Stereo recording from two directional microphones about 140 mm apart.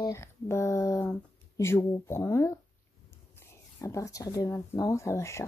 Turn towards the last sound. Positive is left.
turn(degrees=20)  # may be behind; listen again after turning